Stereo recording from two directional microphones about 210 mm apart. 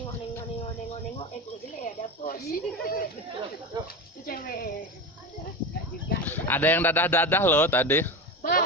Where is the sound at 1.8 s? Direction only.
40° left (ahead or behind).